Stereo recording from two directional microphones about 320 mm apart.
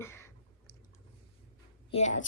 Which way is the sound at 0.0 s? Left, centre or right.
Centre.